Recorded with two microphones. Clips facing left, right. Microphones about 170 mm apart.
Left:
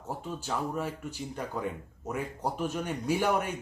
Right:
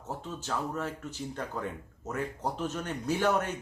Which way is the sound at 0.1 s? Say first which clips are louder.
Left 1 dB; 10° left (ahead or behind).